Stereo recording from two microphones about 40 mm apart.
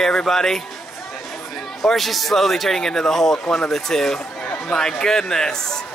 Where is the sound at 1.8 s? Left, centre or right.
Centre.